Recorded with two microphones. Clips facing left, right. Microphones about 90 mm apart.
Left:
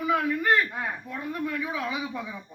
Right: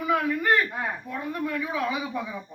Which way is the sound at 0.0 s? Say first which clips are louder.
Right 1 dB; 15° left (ahead or behind).